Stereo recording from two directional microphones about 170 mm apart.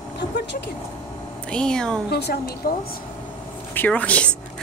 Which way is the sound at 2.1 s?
75° left (ahead or behind).